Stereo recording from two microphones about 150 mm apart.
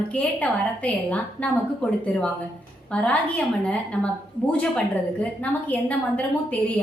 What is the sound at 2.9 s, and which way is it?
A woman's voice, 10° left (ahead or behind).